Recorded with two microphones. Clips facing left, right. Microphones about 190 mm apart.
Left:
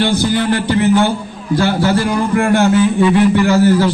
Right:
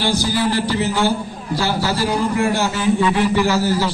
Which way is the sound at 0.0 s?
60° left (ahead or behind).